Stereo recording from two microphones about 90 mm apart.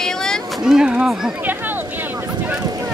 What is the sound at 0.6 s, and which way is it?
Speech, 5° right (ahead or behind).